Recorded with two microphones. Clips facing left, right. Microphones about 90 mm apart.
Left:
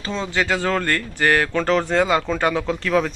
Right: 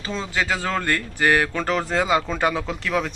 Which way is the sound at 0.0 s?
5° right (ahead or behind).